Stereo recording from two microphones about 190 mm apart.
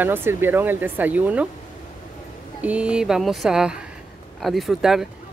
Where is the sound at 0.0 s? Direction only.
10° right (ahead or behind).